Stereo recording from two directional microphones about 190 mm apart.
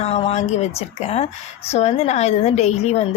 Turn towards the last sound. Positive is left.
turn(degrees=35)  # may be behind; listen again after turning